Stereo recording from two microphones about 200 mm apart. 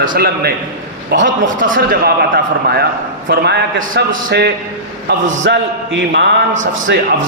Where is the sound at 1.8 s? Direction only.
50° right (ahead or behind).